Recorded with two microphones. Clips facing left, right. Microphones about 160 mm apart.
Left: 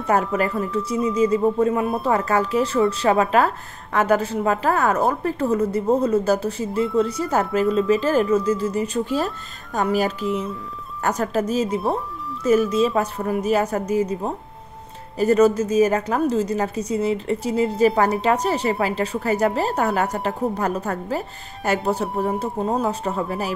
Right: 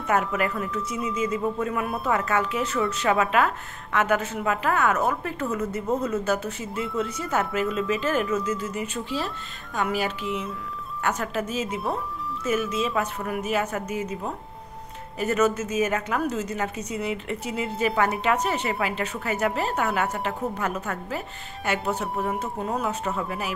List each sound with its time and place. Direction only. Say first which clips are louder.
0.0 s speech: left 4 dB; 35° left (ahead or behind)